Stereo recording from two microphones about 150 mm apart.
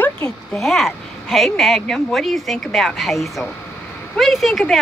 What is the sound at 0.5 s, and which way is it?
Speech, centre (ahead or behind).